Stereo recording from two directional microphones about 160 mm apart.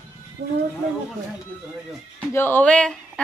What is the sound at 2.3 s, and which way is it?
Speech, 15° left (ahead or behind).